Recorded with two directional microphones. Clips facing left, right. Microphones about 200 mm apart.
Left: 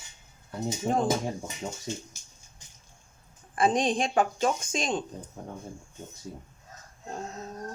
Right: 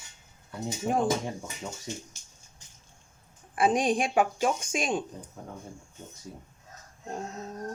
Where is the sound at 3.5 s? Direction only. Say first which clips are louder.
Even; 10° right (ahead or behind).